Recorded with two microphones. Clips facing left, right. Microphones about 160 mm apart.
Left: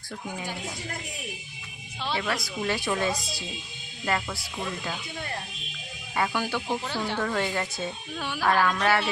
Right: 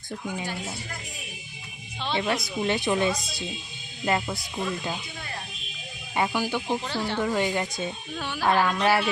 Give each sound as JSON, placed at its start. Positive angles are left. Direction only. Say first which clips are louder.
{"t": 2.1, "sound": "speech", "louder": "right 4 dB", "side_deg": -25}
{"t": 3.2, "sound": "speech", "louder": "even", "side_deg": 0}
{"t": 4.0, "sound": "speech", "louder": "right 3 dB", "side_deg": -20}
{"t": 6.1, "sound": "speech", "louder": "right 2 dB", "side_deg": -15}